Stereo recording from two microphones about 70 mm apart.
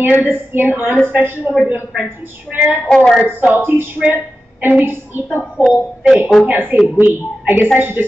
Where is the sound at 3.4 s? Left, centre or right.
Right.